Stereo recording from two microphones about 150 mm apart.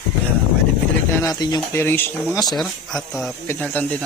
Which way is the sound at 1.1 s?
25° left (ahead or behind).